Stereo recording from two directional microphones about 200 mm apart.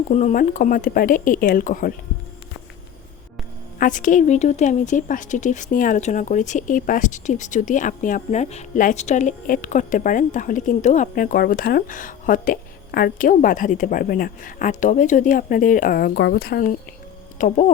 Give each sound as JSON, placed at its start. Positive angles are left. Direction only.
{"t": 0.1, "sound": "speech", "side_deg": 35}
{"t": 3.8, "sound": "a woman's voice", "side_deg": 40}
{"t": 17.3, "sound": "speech", "side_deg": 40}